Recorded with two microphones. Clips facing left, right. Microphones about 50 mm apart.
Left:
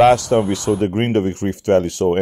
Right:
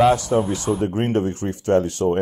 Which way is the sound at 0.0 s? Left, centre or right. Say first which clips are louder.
Left 4 dB; left.